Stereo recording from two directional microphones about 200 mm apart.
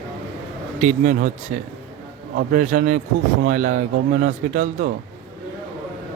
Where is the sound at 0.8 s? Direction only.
35° right (ahead or behind).